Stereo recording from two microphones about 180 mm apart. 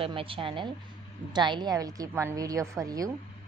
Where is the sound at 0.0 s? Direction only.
30° right (ahead or behind).